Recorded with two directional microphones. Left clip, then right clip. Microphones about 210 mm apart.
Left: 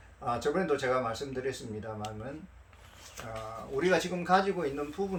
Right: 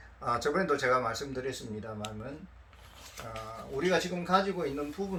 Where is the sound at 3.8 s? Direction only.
20° left (ahead or behind).